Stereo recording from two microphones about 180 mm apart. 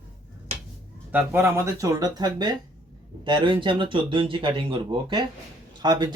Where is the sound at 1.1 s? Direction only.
10° right (ahead or behind).